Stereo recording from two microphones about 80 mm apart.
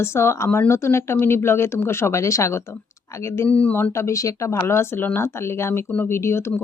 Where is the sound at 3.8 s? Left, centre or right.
Left.